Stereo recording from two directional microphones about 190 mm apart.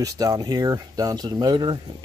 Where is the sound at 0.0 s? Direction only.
15° right (ahead or behind).